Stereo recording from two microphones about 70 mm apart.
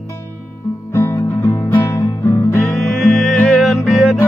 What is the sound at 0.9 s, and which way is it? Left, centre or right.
Music, left.